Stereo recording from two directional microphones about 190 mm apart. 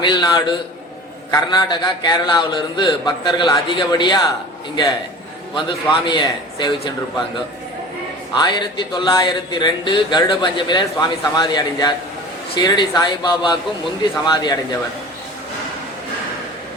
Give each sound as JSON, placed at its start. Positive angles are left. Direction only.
{"t": 0.0, "sound": "a man's voice", "side_deg": 25}
{"t": 5.5, "sound": "speech", "side_deg": 25}
{"t": 8.4, "sound": "speech", "side_deg": 25}